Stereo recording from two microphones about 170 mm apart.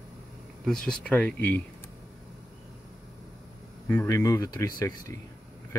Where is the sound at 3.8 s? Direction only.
15° left (ahead or behind).